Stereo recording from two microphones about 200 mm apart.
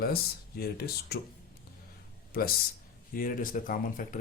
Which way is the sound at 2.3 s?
50° left (ahead or behind).